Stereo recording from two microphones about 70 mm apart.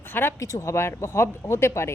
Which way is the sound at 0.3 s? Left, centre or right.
Left.